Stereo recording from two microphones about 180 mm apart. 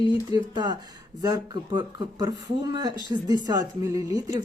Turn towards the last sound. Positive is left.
turn(degrees=-20)  # may be behind; listen again after turning